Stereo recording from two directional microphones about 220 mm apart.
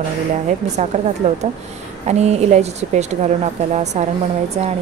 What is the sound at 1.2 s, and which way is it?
Speech, 30° right (ahead or behind).